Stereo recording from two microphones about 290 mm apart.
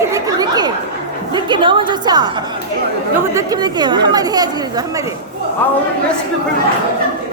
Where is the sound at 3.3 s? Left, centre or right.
Centre.